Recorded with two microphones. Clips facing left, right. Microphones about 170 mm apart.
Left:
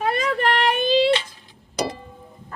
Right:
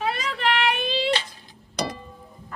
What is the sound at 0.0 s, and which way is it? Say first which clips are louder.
Child singing: left 4 dB; 50° left (ahead or behind).